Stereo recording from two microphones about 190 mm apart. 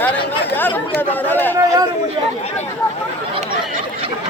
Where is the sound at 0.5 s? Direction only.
10° left (ahead or behind).